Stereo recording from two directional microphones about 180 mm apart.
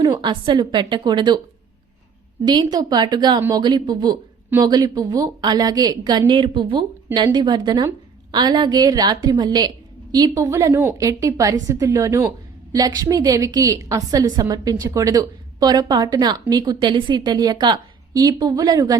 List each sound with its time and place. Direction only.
0.0 s a woman's voice: 25° right (ahead or behind)
2.4 s a woman's voice: 25° right (ahead or behind)